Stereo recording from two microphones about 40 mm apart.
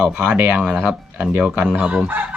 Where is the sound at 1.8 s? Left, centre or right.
Right.